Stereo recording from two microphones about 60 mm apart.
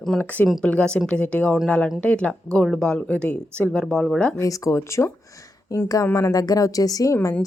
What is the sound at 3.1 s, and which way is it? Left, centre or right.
Speech, left.